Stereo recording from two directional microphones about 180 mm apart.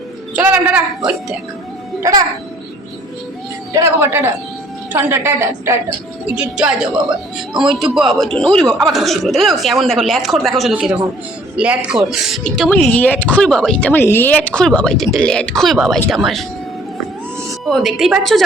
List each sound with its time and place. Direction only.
0.3 s a sound: 10° right (ahead or behind)
2.0 s a child's voice: 20° right (ahead or behind)
3.7 s a woman's voice: 15° right (ahead or behind); by 16.5 s centre (ahead or behind)
17.7 s a woman's voice: centre (ahead or behind)